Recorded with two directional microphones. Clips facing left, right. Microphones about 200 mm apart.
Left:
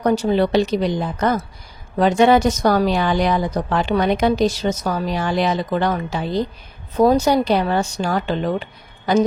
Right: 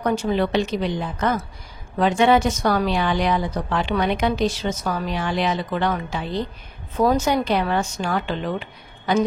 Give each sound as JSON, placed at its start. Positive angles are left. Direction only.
{"t": 0.0, "sound": "speech", "side_deg": 35}